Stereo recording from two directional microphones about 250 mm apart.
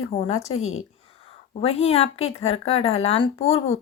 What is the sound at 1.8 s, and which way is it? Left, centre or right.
Speech, left.